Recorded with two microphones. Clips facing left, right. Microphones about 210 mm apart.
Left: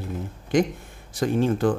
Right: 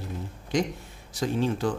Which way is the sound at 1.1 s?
50° left (ahead or behind).